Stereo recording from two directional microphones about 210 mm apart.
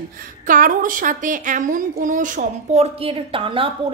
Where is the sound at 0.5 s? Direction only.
40° right (ahead or behind).